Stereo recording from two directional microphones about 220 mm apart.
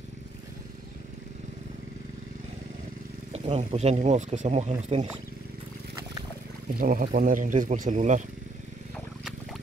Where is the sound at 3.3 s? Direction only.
30° right (ahead or behind).